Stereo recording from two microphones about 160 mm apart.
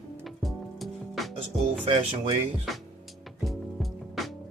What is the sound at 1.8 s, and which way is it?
Speech, 35° right (ahead or behind).